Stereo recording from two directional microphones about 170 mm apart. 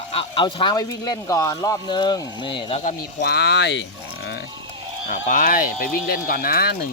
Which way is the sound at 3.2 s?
75° left (ahead or behind).